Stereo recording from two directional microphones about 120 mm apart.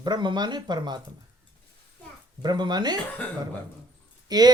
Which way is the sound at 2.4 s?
35° right (ahead or behind).